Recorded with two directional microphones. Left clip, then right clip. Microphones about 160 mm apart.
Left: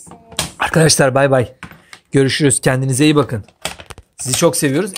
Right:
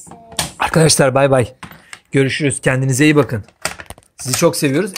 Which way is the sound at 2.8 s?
5° right (ahead or behind).